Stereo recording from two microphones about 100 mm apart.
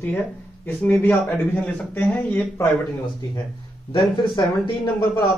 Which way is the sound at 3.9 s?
55° left (ahead or behind).